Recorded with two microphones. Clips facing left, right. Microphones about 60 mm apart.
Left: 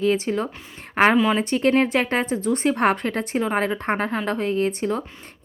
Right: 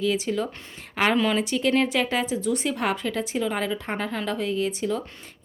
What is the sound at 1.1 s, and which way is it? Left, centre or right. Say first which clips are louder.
Speech: left 3 dB; centre.